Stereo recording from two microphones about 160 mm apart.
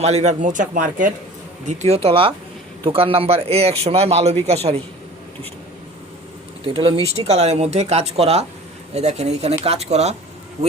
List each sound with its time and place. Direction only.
0.0 s speech: 45° right (ahead or behind)
1.6 s a man's voice: 45° right (ahead or behind)
6.7 s a man's voice: 35° right (ahead or behind)